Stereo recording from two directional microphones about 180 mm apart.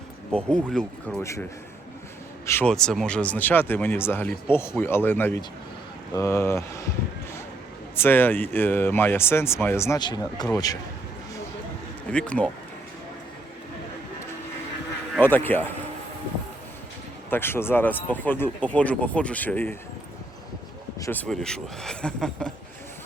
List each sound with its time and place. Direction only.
0.3 s speech: 5° left (ahead or behind)
1.2 s speech: 15° left (ahead or behind)
2.5 s speech: 10° left (ahead or behind)
7.9 s speech: 10° left (ahead or behind)
12.1 s speech: 5° left (ahead or behind)
15.2 s speech: 10° left (ahead or behind)
17.2 s speech: 10° left (ahead or behind)
21.0 s speech: 10° left (ahead or behind)